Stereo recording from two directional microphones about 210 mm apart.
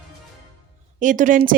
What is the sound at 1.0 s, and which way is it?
Speech, 35° right (ahead or behind).